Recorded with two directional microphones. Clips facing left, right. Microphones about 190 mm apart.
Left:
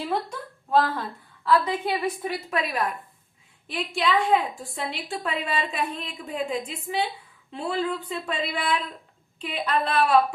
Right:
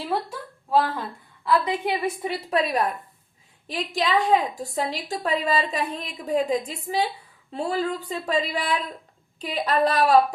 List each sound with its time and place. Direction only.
0.1 s a woman's voice: 5° right (ahead or behind)
2.5 s a woman's voice: 35° right (ahead or behind)